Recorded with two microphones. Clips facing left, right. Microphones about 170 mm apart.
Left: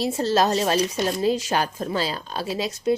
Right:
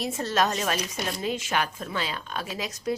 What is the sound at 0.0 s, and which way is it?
Speech, 30° left (ahead or behind).